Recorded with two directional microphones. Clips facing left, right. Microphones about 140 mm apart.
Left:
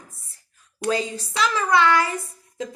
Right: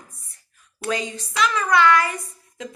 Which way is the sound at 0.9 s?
30° left (ahead or behind).